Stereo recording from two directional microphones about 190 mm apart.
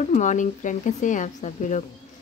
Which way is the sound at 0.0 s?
40° left (ahead or behind).